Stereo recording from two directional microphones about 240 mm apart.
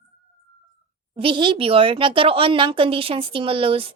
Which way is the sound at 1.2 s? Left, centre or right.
Right.